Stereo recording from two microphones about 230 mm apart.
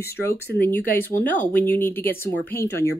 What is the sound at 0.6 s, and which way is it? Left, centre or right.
Speech, centre.